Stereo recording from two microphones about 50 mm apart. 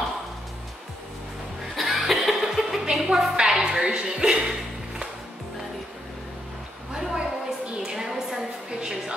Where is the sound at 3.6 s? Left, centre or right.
Centre.